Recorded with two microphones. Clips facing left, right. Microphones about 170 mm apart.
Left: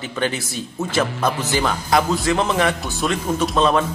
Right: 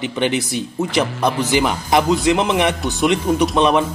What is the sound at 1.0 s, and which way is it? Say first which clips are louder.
Speech: right 3 dB; centre (ahead or behind).